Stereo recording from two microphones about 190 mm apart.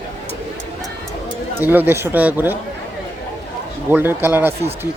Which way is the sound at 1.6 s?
10° right (ahead or behind).